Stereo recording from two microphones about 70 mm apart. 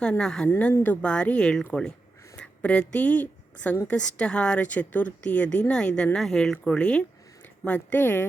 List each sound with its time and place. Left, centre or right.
0.0 s speech: centre
0.4 s speech: left
1.0 s speech: centre; by 8.3 s left